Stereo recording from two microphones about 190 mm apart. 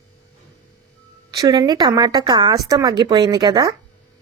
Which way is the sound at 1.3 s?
20° right (ahead or behind).